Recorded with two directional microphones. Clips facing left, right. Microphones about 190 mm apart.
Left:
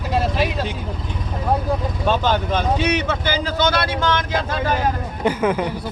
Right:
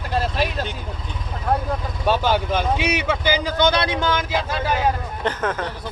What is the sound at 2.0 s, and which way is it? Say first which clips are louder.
Speech: even; 10° right (ahead or behind).